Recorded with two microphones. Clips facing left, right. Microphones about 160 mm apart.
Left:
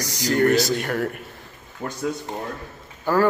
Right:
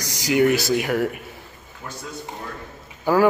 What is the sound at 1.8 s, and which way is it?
Speech, 55° left (ahead or behind).